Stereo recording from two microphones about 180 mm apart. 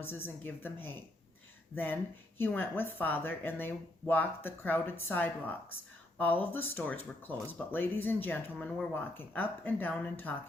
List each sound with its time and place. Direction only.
0.4 s speech: 10° left (ahead or behind)